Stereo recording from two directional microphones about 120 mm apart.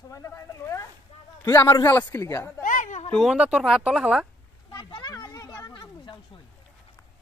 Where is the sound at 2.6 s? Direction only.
90° left.